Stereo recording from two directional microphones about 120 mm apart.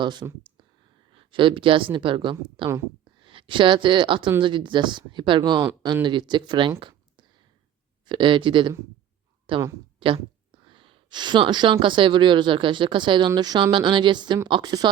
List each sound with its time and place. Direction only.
0.0 s speech: 40° right (ahead or behind)